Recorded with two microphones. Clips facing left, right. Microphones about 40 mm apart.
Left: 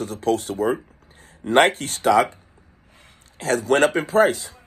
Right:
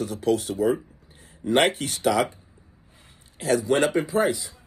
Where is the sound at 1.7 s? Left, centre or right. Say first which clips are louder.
Left 1 dB; left.